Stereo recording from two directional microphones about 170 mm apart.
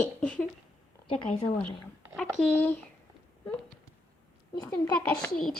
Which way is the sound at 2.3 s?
5° left (ahead or behind).